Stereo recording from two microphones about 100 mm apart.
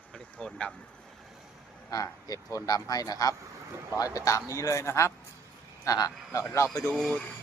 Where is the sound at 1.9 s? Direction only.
35° left (ahead or behind).